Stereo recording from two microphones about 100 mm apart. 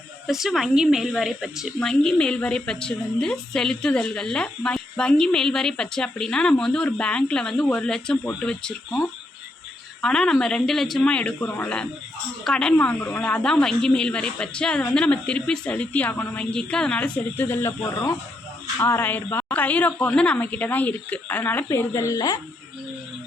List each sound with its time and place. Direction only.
0.3 s speech: 5° right (ahead or behind)
1.8 s a woman's voice: 5° left (ahead or behind)
10.0 s a woman's voice: 5° left (ahead or behind); by 17.7 s 25° left (ahead or behind)
18.8 s a woman's voice: 25° left (ahead or behind)